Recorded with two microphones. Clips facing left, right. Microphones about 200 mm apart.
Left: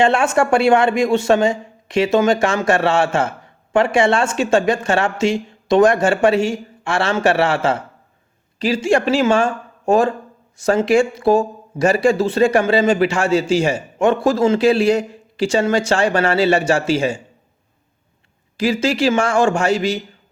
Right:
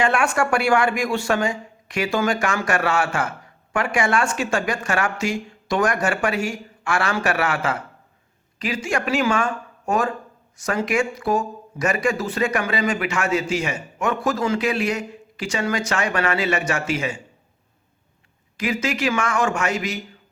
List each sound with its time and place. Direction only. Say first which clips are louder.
0.0 s speech: left 5 dB; 25° left (ahead or behind)
18.5 s speech: left 6 dB; 30° left (ahead or behind)